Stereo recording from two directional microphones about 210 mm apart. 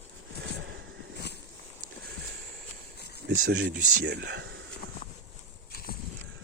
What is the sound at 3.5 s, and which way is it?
Speech, 55° right (ahead or behind).